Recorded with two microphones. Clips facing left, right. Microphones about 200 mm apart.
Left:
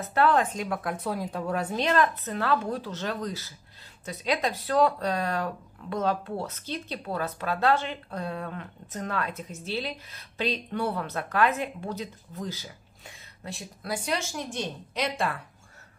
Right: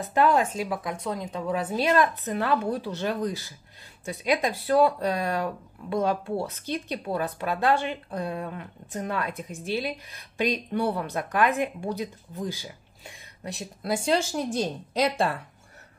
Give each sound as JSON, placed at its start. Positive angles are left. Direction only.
{"t": 0.0, "sound": "speech", "side_deg": -15}
{"t": 0.6, "sound": "a woman's voice", "side_deg": 0}